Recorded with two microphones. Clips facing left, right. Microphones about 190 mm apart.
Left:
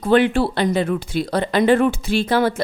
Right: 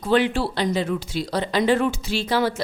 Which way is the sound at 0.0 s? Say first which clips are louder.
Left 4 dB; 55° left (ahead or behind).